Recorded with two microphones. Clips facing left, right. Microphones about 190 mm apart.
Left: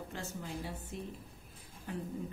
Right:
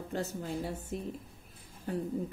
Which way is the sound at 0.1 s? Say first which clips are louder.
Right 10 dB; 40° right (ahead or behind).